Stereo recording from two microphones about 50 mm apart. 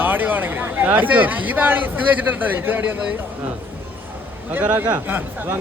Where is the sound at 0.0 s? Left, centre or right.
Right.